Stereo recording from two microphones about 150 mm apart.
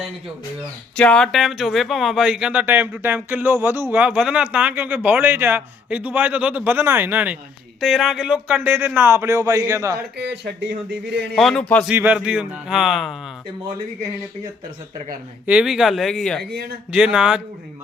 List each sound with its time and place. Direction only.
0.9 s speech: 5° left (ahead or behind); by 10.0 s 20° right (ahead or behind)
10.2 s speech: 90° right
11.3 s speech: centre (ahead or behind)
11.9 s speech: 10° right (ahead or behind)
15.4 s speech: 5° right (ahead or behind)
16.4 s speech: 90° right
16.9 s speech: 5° right (ahead or behind)